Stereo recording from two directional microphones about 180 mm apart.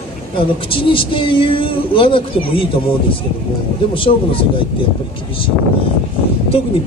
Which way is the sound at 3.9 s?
30° left (ahead or behind).